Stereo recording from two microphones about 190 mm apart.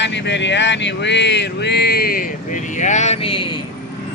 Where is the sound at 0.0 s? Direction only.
70° left (ahead or behind); by 2.2 s 55° left (ahead or behind).